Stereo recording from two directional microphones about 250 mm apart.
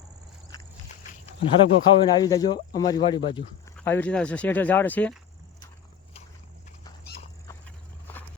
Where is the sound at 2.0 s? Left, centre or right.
Centre.